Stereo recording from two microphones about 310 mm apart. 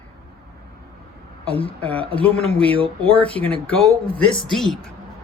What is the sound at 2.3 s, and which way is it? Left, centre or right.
Speech, centre.